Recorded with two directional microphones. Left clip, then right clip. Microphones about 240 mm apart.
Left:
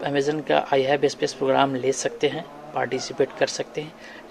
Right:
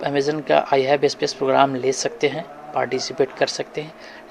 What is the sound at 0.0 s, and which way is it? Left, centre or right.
A man's voice, centre.